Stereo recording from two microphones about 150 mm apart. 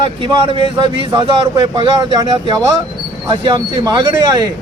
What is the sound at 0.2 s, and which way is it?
A man's voice, 30° right (ahead or behind).